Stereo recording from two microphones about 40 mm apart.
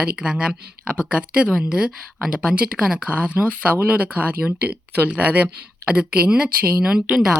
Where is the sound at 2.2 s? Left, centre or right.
Centre.